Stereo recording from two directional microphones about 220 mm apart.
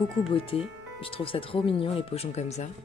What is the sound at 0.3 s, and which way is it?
Speech, 25° left (ahead or behind).